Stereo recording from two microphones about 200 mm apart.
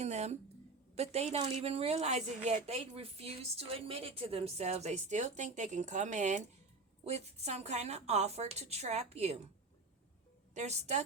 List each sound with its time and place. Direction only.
0.0 s a sound: 35° right (ahead or behind)
0.9 s a woman's voice: 30° right (ahead or behind)
10.5 s a woman's voice: 35° right (ahead or behind)